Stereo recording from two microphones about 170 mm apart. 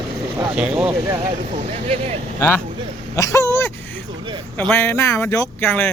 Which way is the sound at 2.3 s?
15° left (ahead or behind).